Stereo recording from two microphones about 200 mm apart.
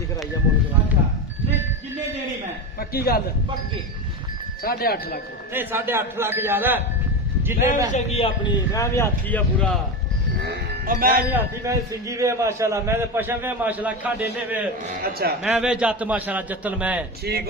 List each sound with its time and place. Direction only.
2.7 s a sound: 50° left (ahead or behind)
4.6 s speech: 50° left (ahead or behind)
5.5 s a man's voice: 10° right (ahead or behind)
7.9 s a man's voice: 30° left (ahead or behind)
8.7 s speech: 15° left (ahead or behind)
10.4 s a sound: 45° right (ahead or behind)
11.3 s a man's voice: 15° right (ahead or behind)
15.0 s speech: 50° right (ahead or behind)
15.4 s a man's voice: 5° right (ahead or behind)
17.3 s speech: 55° right (ahead or behind)